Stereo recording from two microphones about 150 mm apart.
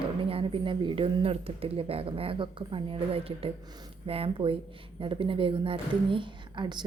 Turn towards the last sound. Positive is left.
turn(degrees=-30)  # may be behind; listen again after turning